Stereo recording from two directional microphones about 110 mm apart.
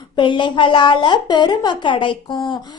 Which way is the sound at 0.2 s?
45° left (ahead or behind).